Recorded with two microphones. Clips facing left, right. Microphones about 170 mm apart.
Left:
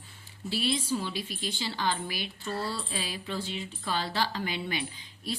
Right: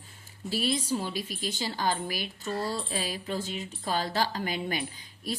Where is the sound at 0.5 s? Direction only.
45° right (ahead or behind).